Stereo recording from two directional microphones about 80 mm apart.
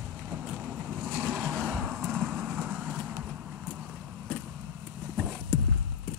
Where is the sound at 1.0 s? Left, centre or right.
Right.